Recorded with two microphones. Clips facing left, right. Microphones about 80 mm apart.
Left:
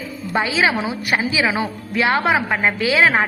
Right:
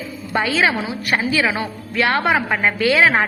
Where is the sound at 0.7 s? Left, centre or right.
Left.